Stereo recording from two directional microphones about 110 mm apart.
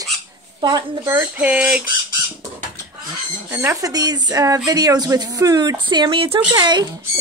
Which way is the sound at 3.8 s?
35° right (ahead or behind).